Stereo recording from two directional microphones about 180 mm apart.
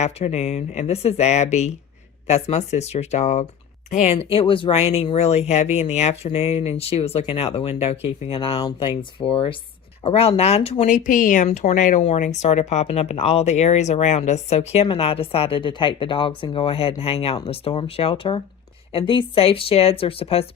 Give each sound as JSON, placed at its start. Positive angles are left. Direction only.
{"t": 0.0, "sound": "speech", "side_deg": 35}